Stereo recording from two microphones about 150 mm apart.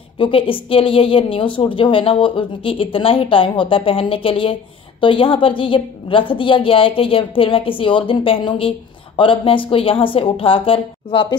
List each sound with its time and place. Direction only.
0.2 s a woman's voice: 35° left (ahead or behind)